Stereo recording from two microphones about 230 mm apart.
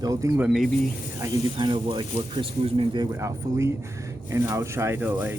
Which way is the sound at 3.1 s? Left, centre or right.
Centre.